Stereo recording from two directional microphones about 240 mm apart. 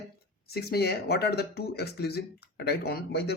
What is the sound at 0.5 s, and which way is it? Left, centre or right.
Speech, left.